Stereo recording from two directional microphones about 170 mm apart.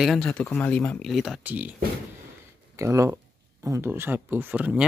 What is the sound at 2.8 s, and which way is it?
Speech, 15° right (ahead or behind).